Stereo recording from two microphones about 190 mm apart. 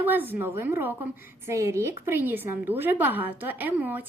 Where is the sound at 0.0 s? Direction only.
10° right (ahead or behind).